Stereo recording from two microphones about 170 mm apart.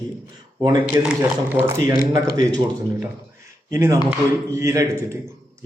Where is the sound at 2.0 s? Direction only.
60° left (ahead or behind).